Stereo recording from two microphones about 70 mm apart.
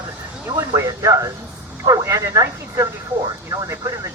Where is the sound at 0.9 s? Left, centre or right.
Right.